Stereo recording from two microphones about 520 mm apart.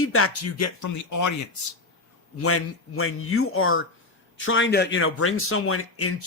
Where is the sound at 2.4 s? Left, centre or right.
Left.